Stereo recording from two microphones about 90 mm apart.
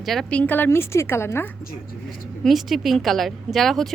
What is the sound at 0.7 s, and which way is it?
Speech, 30° left (ahead or behind).